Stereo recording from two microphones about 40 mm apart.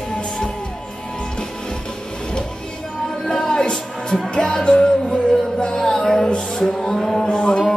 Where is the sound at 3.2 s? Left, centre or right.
Left.